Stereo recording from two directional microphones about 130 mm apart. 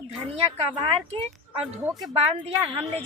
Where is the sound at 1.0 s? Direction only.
50° right (ahead or behind).